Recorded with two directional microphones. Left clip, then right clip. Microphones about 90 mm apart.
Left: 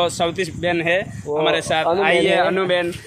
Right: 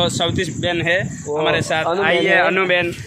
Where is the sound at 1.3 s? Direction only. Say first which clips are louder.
Even; 5° left (ahead or behind).